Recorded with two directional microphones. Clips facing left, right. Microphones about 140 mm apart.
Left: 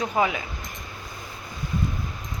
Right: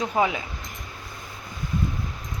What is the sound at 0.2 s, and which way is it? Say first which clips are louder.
Speech: right 1 dB; 25° right (ahead or behind).